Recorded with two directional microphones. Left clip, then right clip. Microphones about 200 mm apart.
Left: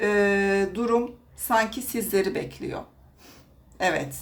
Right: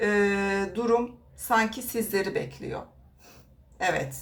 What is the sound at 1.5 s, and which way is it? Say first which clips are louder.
A woman's voice: left 1 dB; 25° left (ahead or behind).